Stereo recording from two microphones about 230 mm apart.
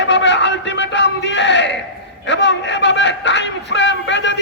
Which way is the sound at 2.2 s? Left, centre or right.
Left.